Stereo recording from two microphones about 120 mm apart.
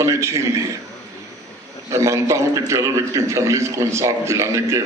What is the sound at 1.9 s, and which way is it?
A man's voice, 25° right (ahead or behind).